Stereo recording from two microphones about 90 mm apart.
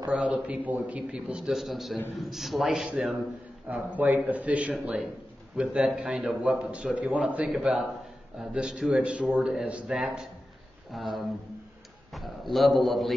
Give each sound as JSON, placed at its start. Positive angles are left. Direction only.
{"t": 0.1, "sound": "a man's voice", "side_deg": -15}
{"t": 3.9, "sound": "a man's voice", "side_deg": -20}